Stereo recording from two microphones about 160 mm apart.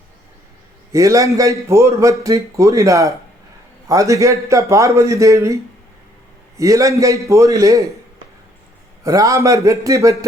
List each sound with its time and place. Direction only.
0.9 s a man's voice: 20° right (ahead or behind)
6.6 s a man's voice: 20° right (ahead or behind)
9.0 s a man's voice: 20° right (ahead or behind)